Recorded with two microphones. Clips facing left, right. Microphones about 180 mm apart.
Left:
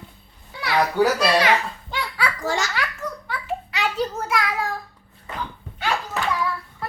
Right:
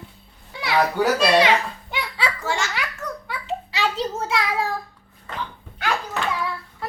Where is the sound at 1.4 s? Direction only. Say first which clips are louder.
Right 2 dB; 20° right (ahead or behind).